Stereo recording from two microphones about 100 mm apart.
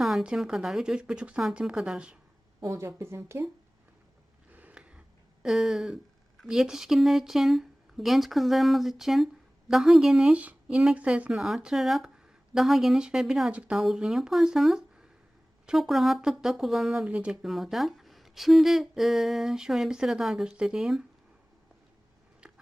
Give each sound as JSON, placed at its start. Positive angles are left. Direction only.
{"t": 0.0, "sound": "speech", "side_deg": -5}
{"t": 2.6, "sound": "speech", "side_deg": -25}
{"t": 4.5, "sound": "a sound", "side_deg": -15}
{"t": 5.5, "sound": "speech", "side_deg": 0}
{"t": 17.1, "sound": "speech", "side_deg": -10}
{"t": 17.4, "sound": "speech", "side_deg": 0}